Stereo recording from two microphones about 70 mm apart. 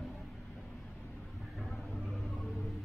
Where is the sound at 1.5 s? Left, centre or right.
Centre.